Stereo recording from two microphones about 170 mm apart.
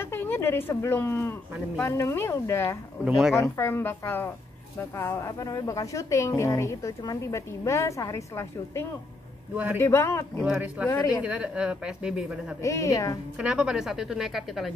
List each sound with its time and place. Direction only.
0.0 s a woman's voice: 15° left (ahead or behind)
3.1 s speech: 5° right (ahead or behind)
3.3 s a woman's voice: 15° left (ahead or behind)
10.4 s speech: 5° right (ahead or behind)
12.6 s a woman's voice: 20° left (ahead or behind)
13.4 s speech: 5° right (ahead or behind)